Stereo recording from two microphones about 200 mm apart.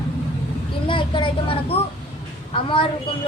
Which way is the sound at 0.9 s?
25° left (ahead or behind).